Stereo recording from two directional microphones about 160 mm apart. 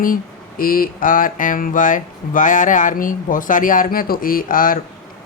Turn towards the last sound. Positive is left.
turn(degrees=60)  # may be behind; listen again after turning